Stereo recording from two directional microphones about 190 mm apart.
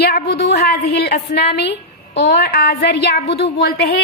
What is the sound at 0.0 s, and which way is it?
A woman's voice, 55° left (ahead or behind).